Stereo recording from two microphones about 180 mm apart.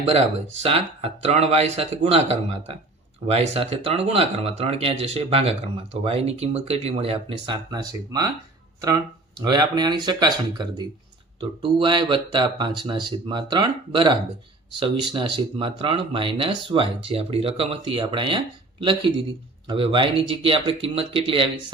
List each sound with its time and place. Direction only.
0.6 s speech: 35° right (ahead or behind)
9.4 s speech: 20° right (ahead or behind)